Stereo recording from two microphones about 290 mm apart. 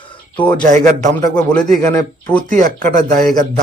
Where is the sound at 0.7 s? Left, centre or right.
Right.